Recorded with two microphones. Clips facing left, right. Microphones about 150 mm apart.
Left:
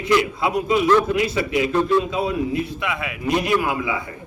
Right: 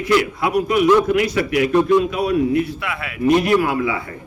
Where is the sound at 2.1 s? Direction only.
25° left (ahead or behind).